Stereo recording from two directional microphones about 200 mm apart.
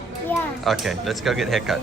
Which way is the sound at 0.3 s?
Centre (ahead or behind).